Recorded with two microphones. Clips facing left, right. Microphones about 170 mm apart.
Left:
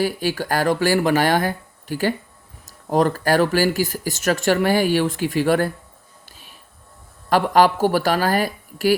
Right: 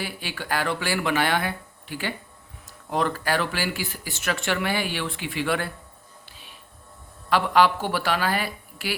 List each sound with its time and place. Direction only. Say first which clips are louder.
0.0 s speech: left 11 dB; 40° left (ahead or behind)
6.2 s music: left 1 dB; 45° left (ahead or behind)
7.3 s speech: left 4 dB; 45° left (ahead or behind)